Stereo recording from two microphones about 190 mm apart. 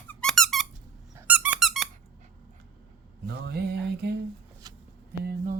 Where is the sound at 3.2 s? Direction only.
60° right (ahead or behind).